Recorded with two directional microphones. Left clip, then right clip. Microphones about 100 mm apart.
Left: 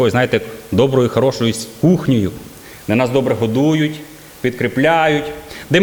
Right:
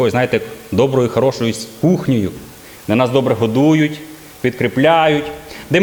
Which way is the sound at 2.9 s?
35° left (ahead or behind).